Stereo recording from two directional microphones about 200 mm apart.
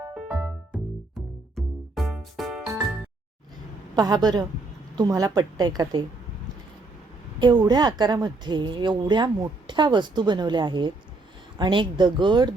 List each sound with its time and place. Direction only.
0.3 s music: 15° right (ahead or behind)
1.5 s music: centre (ahead or behind)
3.9 s a woman's voice: 20° right (ahead or behind)
7.3 s a woman's voice: 20° right (ahead or behind)